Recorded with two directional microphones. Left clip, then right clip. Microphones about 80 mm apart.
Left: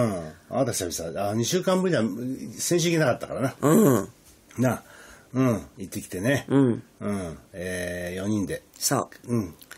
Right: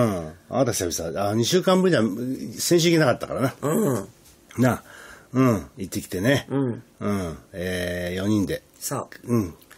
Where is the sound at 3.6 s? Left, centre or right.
Left.